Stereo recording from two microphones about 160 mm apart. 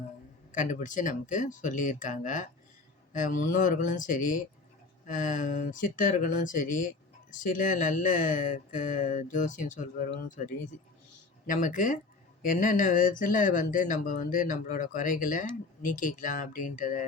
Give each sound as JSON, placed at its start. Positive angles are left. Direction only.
{"t": 0.5, "sound": "speech", "side_deg": 55}